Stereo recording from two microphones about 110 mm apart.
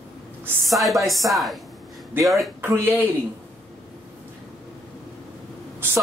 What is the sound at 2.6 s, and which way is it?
Speech, 20° right (ahead or behind).